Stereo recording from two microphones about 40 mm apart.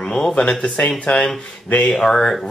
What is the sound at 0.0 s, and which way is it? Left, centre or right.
Speech, left.